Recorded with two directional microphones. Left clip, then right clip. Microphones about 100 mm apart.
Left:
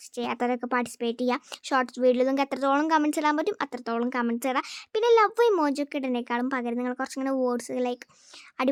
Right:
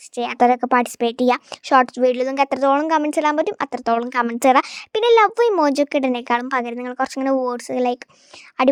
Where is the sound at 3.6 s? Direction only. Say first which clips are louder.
Right 9 dB; 60° right (ahead or behind); by 4.7 s 85° right.